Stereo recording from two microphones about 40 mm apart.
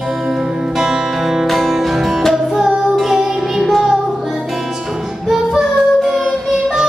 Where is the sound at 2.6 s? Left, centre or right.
Centre.